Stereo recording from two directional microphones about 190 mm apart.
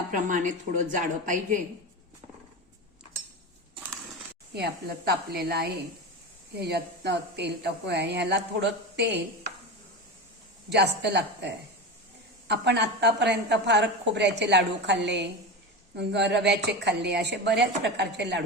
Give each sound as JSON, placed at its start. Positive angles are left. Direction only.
{"t": 0.1, "sound": "a woman's voice", "side_deg": -40}
{"t": 4.5, "sound": "a woman's voice", "side_deg": -60}
{"t": 10.7, "sound": "a woman's voice", "side_deg": -60}